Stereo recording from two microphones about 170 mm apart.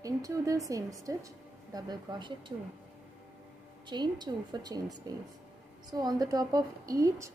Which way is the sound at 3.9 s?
25° right (ahead or behind).